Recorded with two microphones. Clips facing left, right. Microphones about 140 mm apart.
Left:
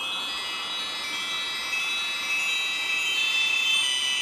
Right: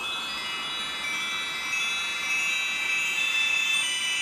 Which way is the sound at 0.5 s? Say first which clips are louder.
Even; 25° left (ahead or behind).